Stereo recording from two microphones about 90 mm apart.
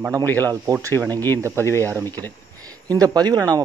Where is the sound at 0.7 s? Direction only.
40° right (ahead or behind).